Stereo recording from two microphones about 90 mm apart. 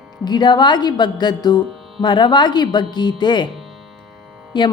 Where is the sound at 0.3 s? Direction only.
55° left (ahead or behind).